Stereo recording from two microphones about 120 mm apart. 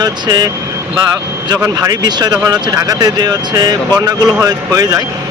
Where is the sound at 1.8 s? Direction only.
30° right (ahead or behind).